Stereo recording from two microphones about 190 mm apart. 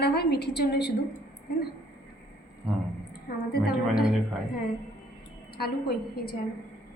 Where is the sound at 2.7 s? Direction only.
5° right (ahead or behind).